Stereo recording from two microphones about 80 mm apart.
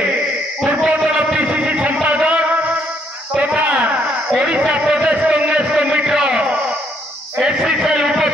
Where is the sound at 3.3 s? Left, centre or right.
Centre.